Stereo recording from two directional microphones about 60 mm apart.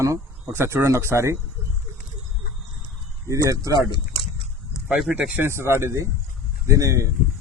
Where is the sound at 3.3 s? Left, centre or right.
Right.